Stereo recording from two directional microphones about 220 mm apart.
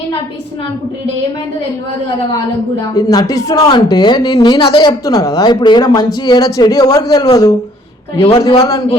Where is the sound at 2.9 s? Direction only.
15° left (ahead or behind).